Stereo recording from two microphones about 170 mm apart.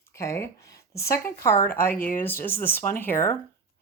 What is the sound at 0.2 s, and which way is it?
Speech, 15° left (ahead or behind).